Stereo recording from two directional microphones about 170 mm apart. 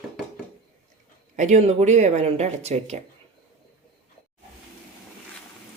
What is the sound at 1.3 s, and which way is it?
Speech, 45° right (ahead or behind).